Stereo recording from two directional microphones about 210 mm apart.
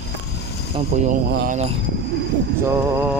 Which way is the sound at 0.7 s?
35° right (ahead or behind).